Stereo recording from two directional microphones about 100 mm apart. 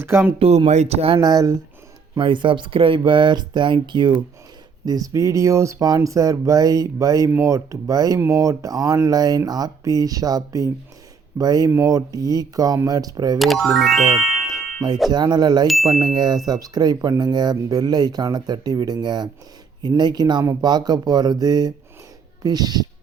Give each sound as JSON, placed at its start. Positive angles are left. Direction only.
{"t": 0.0, "sound": "speech", "side_deg": -25}
{"t": 0.3, "sound": "speech", "side_deg": -85}
{"t": 1.2, "sound": "speech", "side_deg": -40}
{"t": 2.1, "sound": "speech", "side_deg": -55}
{"t": 4.9, "sound": "speech", "side_deg": -35}
{"t": 7.3, "sound": "speech", "side_deg": -25}
{"t": 13.4, "sound": "speech", "side_deg": 0}
{"t": 15.1, "sound": "speech", "side_deg": -45}
{"t": 15.6, "sound": "speech", "side_deg": 0}
{"t": 15.9, "sound": "speech", "side_deg": -40}